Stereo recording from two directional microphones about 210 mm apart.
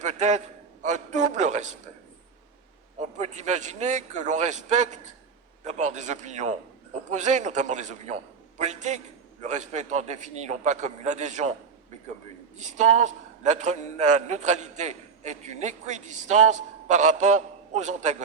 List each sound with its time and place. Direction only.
0.0 s a man's voice: 35° right (ahead or behind)
3.0 s a man's voice: 35° right (ahead or behind)
12.5 s a man's voice: 35° right (ahead or behind)